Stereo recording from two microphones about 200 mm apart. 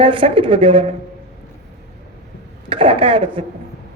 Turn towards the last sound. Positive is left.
turn(degrees=-25)  # may be behind; listen again after turning